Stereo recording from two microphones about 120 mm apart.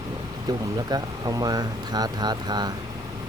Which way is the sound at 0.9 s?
35° right (ahead or behind).